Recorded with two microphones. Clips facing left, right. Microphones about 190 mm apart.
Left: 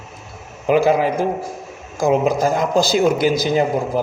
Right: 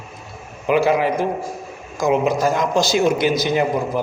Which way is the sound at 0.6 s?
40° left (ahead or behind).